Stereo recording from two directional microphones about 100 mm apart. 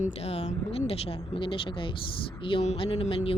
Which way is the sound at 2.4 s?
75° left (ahead or behind).